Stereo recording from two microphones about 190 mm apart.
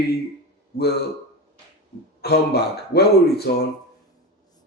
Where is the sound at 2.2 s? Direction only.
60° left (ahead or behind).